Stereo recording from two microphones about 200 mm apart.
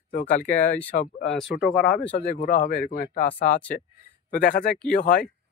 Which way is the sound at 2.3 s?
45° left (ahead or behind).